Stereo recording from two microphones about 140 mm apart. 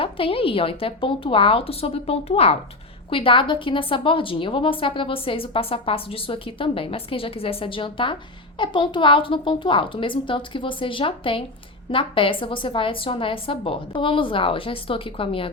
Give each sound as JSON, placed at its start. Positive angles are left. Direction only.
{"t": 0.0, "sound": "a woman's voice", "side_deg": 40}